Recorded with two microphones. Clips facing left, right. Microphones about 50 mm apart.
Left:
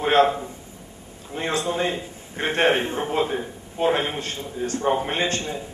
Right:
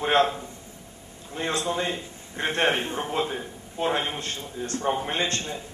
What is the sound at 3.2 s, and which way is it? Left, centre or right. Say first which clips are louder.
A man's voice: left 4 dB; centre.